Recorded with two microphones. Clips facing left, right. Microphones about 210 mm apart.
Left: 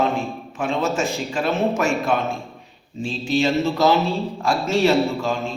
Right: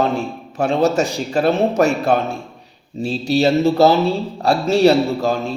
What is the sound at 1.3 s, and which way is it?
Speech, 35° right (ahead or behind).